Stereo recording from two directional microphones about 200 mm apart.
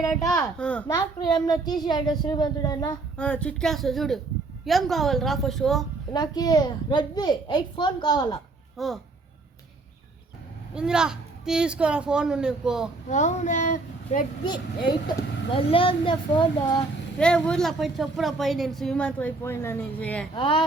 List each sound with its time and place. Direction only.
0.1 s a woman's voice: centre (ahead or behind)
0.9 s a child's voice: 20° left (ahead or behind)
3.2 s a woman's voice: 5° left (ahead or behind)
6.1 s a child's voice: 20° left (ahead or behind)
8.8 s a woman's voice: centre (ahead or behind)
10.8 s a woman's voice: 5° right (ahead or behind)
13.1 s speech: 35° left (ahead or behind)
14.4 s a child's voice: 20° left (ahead or behind)
17.2 s a woman's voice: 5° left (ahead or behind)
20.3 s a child's voice: 25° left (ahead or behind)